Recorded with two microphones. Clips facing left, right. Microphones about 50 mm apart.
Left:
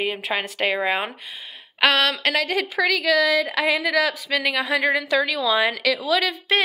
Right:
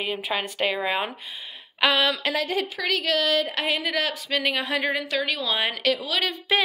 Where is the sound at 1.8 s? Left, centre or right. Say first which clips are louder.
Left 3 dB; left.